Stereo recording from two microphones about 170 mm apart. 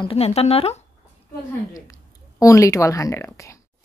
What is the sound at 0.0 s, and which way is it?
Speech, 35° left (ahead or behind).